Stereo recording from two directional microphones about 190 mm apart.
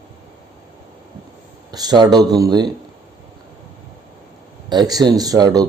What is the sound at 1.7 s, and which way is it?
Speech, 20° right (ahead or behind).